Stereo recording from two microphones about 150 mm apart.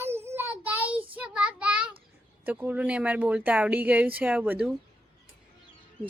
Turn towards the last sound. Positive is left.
turn(degrees=-10)  # may be behind; listen again after turning